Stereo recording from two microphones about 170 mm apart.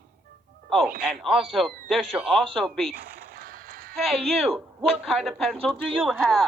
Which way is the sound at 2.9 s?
60° right (ahead or behind).